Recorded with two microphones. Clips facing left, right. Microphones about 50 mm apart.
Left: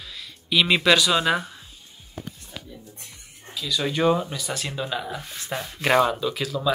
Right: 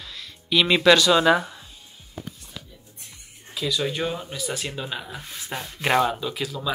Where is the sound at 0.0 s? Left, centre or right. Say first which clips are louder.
Even; centre.